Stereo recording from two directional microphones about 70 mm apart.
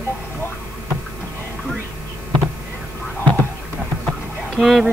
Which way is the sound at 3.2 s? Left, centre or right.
Centre.